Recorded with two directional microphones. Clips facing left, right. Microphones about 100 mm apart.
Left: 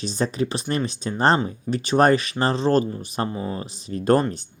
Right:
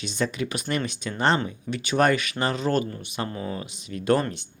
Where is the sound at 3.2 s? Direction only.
20° left (ahead or behind).